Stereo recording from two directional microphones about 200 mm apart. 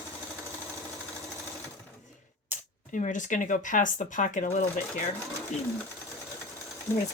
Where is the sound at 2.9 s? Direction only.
40° left (ahead or behind).